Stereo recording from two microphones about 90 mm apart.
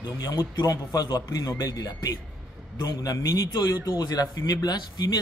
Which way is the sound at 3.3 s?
50° left (ahead or behind).